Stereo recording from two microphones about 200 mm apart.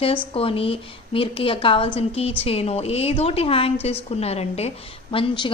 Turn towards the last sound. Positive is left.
turn(degrees=25)  # may be behind; listen again after turning